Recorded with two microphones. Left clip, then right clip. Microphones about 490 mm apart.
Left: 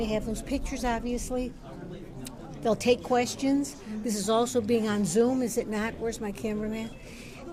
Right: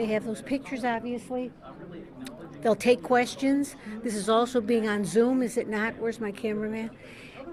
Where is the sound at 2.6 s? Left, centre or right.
Right.